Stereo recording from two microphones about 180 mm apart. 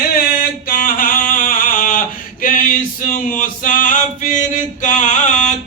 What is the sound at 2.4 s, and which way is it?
Male singing, 50° left (ahead or behind).